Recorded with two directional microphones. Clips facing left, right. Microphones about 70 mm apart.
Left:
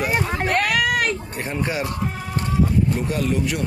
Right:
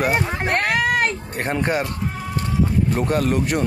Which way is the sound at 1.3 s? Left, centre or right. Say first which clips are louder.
Right 4 dB; right.